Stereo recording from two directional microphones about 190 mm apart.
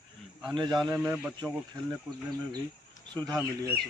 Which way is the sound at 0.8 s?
5° right (ahead or behind).